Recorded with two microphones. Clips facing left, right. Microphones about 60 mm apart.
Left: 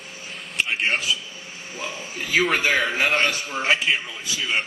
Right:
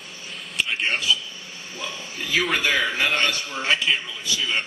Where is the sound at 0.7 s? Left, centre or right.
Centre.